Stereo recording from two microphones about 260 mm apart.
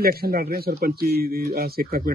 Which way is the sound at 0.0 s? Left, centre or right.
Right.